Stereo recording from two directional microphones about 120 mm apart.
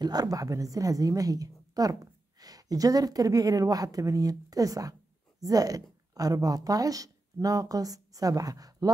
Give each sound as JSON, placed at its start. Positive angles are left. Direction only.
{"t": 0.0, "sound": "a woman's voice", "side_deg": -35}